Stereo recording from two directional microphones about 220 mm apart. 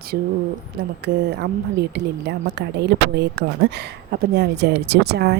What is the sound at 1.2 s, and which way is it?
Speech, 50° right (ahead or behind).